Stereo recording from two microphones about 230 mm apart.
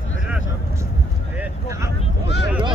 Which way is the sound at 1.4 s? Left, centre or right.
Centre.